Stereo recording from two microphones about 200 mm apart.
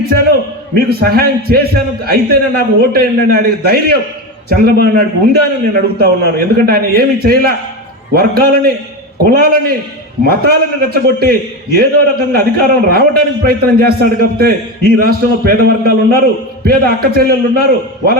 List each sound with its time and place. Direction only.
0.7 s a man's voice: 50° right (ahead or behind)